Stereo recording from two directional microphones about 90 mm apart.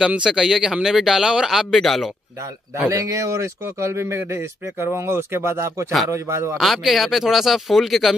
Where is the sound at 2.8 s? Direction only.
35° right (ahead or behind).